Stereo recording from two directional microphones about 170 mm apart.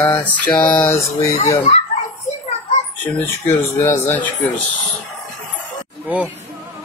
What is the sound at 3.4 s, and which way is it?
Speech, 15° left (ahead or behind).